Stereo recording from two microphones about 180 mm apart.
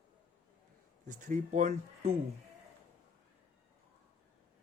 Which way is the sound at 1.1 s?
40° right (ahead or behind).